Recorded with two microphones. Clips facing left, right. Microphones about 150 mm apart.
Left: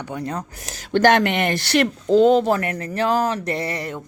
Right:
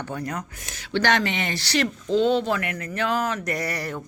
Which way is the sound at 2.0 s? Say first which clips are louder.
Left 7 dB; 45° left (ahead or behind).